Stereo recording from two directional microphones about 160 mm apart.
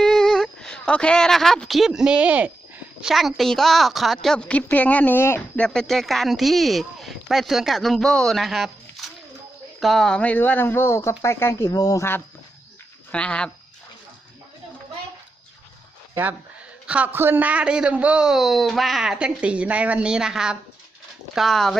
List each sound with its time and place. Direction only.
0.0 s speech: 5° left (ahead or behind)
5.6 s speech: 5° left (ahead or behind)
16.8 s a man's voice: 10° right (ahead or behind)